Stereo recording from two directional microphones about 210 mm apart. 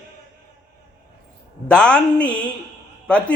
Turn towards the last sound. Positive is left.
turn(degrees=5)  # may be behind; listen again after turning